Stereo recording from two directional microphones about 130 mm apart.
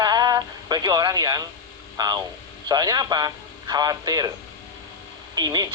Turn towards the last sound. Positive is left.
turn(degrees=-30)  # may be behind; listen again after turning